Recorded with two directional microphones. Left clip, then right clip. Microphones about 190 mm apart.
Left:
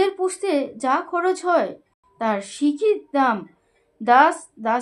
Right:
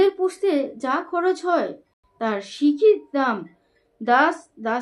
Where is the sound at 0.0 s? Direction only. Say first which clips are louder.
Right 2 dB; 40° left (ahead or behind).